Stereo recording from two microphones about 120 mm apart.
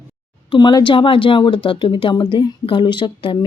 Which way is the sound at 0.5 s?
40° left (ahead or behind).